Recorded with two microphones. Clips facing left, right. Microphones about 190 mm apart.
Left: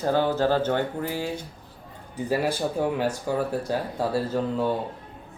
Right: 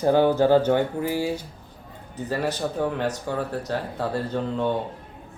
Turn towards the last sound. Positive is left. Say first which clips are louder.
# even
turn(degrees=5)  # may be behind; listen again after turning